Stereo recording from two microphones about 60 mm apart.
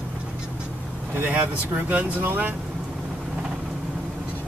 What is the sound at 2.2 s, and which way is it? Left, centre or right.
Speech, right.